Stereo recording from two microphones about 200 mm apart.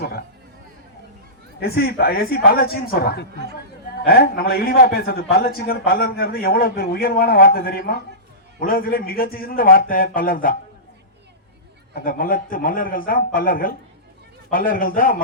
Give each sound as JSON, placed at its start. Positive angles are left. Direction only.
{"t": 1.5, "sound": "a man's voice", "side_deg": 50}
{"t": 11.9, "sound": "a man's voice", "side_deg": 45}